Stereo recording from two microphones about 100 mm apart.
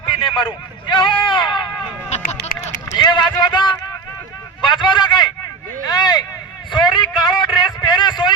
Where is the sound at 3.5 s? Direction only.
50° left (ahead or behind).